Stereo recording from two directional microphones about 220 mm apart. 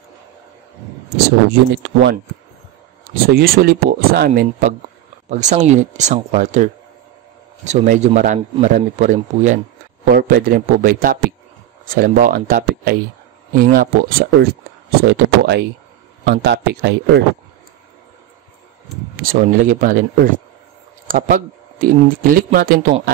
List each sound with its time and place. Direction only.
1.1 s speech: 45° right (ahead or behind)
3.3 s a man's voice: 45° right (ahead or behind)
19.1 s a man's voice: 40° right (ahead or behind)